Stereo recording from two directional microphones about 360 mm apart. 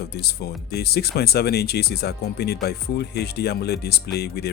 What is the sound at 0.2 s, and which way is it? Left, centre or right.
Speech, left.